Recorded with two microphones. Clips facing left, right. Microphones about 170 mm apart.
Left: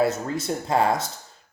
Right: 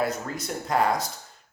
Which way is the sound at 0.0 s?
25° left (ahead or behind).